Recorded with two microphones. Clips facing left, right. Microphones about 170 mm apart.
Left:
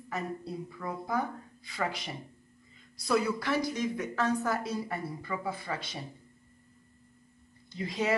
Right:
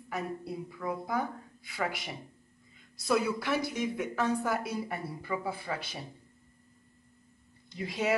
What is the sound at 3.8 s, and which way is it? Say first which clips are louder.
A woman's voice: even; 10° right (ahead or behind).